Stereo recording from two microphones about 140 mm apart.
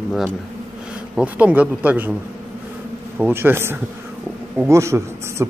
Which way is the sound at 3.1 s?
15° right (ahead or behind).